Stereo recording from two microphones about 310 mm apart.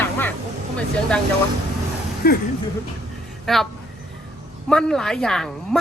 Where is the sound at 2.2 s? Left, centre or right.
Left.